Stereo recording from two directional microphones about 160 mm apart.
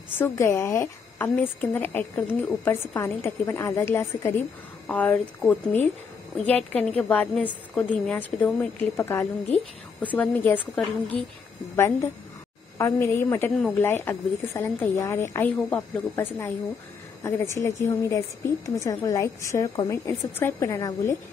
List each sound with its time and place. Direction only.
0.2 s a woman's voice: 15° left (ahead or behind)
11.7 s a woman's voice: 15° left (ahead or behind)